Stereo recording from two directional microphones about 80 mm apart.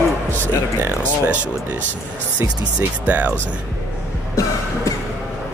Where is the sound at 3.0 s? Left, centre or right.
Centre.